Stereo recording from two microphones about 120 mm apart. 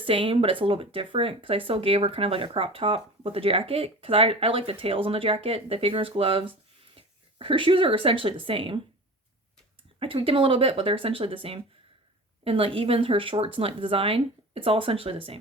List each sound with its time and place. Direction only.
0.0 s speech: 50° right (ahead or behind)
10.0 s speech: 50° right (ahead or behind)